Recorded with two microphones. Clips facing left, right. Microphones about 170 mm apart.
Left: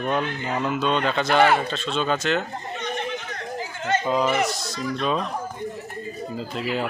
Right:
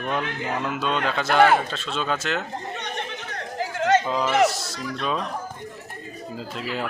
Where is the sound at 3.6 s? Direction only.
90° right.